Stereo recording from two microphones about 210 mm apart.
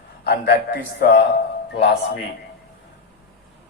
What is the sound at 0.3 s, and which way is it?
Speech, 50° left (ahead or behind).